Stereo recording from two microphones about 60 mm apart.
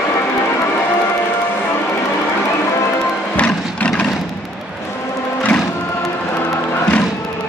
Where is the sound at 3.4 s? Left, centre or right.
Left.